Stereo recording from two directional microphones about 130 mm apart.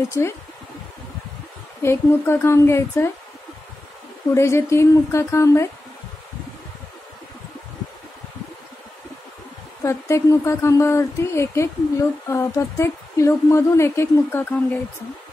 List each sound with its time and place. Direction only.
0.2 s a woman's voice: 20° left (ahead or behind)
1.8 s a woman's voice: 20° left (ahead or behind)
4.3 s a woman's voice: 20° left (ahead or behind)
9.8 s a woman's voice: 20° left (ahead or behind)